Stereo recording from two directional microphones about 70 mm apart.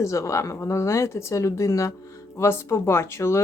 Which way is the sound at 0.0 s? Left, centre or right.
Left.